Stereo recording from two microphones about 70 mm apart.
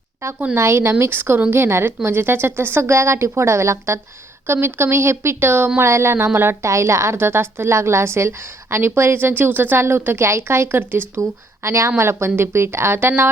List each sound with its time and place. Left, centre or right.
0.5 s speech: right
11.2 s speech: right